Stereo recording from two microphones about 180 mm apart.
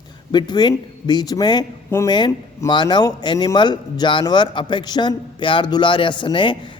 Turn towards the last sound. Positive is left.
turn(degrees=25)  # may be behind; listen again after turning